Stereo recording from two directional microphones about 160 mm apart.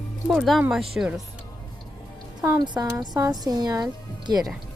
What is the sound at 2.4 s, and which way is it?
Speech, 25° right (ahead or behind).